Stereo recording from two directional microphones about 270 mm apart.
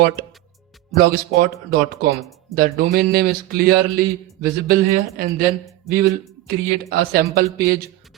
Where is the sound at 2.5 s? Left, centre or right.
Right.